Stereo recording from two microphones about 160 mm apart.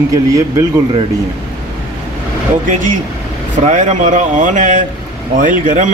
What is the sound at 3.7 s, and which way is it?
A man's voice, 50° right (ahead or behind).